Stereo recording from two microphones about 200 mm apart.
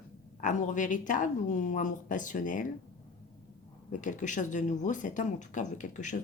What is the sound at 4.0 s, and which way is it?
Speech, 40° left (ahead or behind).